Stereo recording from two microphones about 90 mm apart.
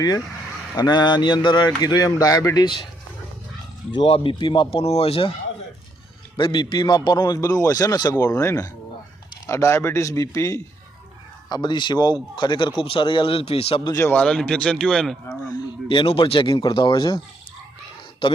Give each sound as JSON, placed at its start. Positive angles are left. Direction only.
{"t": 0.8, "sound": "speech", "side_deg": 55}
{"t": 3.9, "sound": "speech", "side_deg": 70}
{"t": 6.3, "sound": "a man's voice", "side_deg": 60}
{"t": 11.4, "sound": "speech", "side_deg": 55}
{"t": 12.8, "sound": "speech", "side_deg": 80}
{"t": 14.1, "sound": "a man's voice", "side_deg": 15}
{"t": 15.9, "sound": "speech", "side_deg": 80}